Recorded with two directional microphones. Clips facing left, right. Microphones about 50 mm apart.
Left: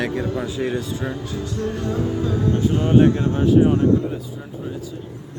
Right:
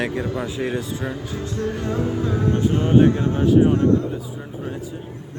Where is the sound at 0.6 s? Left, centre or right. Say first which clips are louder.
Left 1 dB; centre.